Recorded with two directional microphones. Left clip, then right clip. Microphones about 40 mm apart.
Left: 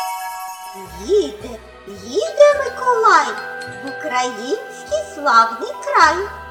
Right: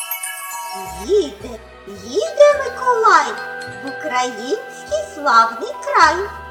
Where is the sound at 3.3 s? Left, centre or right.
Right.